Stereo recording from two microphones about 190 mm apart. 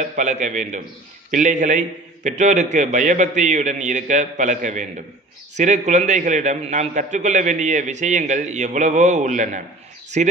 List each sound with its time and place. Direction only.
0.0 s a man's voice: 40° right (ahead or behind)